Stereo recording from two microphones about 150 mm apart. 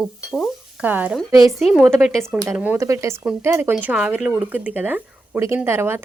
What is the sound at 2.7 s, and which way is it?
Speech, 20° right (ahead or behind).